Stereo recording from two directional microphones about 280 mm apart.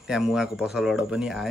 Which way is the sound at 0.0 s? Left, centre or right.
Centre.